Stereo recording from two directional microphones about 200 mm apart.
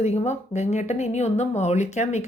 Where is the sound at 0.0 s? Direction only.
35° left (ahead or behind).